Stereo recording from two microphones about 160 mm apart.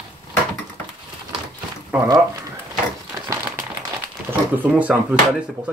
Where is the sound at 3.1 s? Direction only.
20° right (ahead or behind).